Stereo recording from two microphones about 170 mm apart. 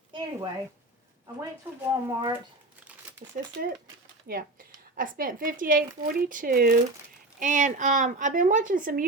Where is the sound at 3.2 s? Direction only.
50° right (ahead or behind).